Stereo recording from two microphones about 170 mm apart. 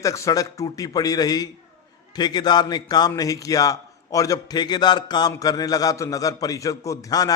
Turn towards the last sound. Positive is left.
turn(degrees=20)  # may be behind; listen again after turning